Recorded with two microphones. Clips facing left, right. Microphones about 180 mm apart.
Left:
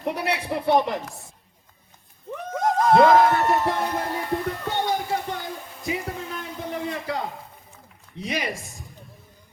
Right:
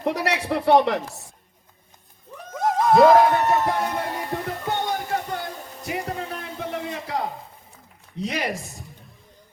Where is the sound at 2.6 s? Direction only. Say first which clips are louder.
Even; 5° right (ahead or behind).